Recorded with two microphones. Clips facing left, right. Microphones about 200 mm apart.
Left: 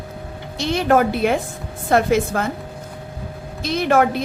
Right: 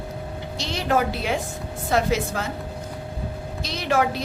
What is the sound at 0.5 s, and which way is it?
A woman's voice, 55° left (ahead or behind).